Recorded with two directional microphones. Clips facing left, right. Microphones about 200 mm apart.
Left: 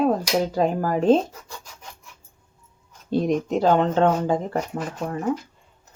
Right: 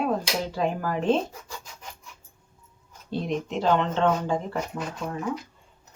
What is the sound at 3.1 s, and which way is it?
Speech, 40° left (ahead or behind).